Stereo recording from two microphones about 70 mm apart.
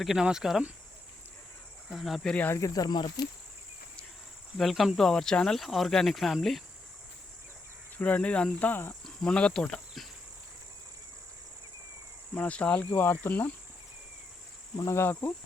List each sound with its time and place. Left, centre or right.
0.0 s speech: centre
1.9 s speech: centre
2.6 s speech: left
4.5 s speech: centre
7.9 s speech: centre
9.0 s speech: centre
12.3 s speech: centre
14.8 s speech: left